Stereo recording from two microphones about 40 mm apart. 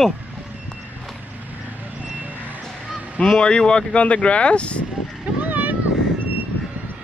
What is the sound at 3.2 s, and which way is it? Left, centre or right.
Speech, left.